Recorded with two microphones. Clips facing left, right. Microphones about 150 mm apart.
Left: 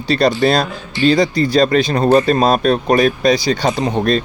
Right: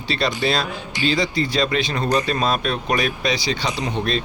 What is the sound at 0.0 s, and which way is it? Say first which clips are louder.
Speech: left 8 dB; 40° left (ahead or behind).